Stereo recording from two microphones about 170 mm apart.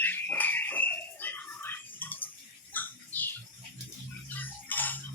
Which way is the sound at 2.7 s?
10° left (ahead or behind).